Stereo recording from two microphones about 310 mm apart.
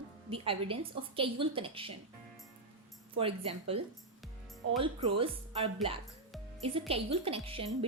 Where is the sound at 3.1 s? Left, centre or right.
Centre.